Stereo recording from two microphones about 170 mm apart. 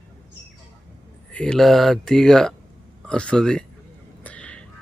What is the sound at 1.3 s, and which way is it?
Speech, 5° left (ahead or behind).